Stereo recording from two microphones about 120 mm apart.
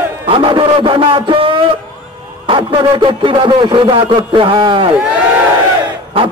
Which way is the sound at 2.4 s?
45° right (ahead or behind).